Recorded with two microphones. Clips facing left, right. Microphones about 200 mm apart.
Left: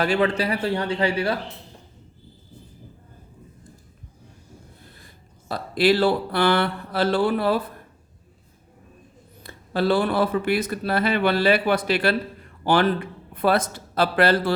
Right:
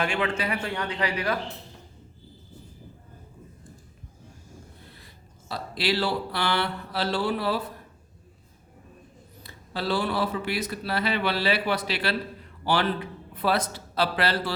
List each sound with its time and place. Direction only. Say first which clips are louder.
0.0 s a man's voice: left 6 dB; 35° left (ahead or behind)
5.5 s speech: left 8 dB; 50° left (ahead or behind)
9.4 s a man's voice: left 9 dB; 55° left (ahead or behind)